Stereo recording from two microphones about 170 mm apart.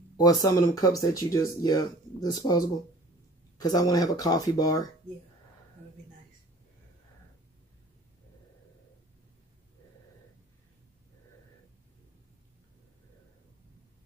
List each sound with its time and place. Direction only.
0.2 s speech: 20° left (ahead or behind)